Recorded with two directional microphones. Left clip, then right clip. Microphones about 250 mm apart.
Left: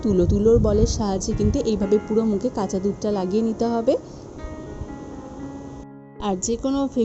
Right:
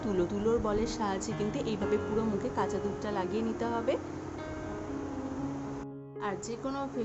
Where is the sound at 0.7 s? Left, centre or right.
Left.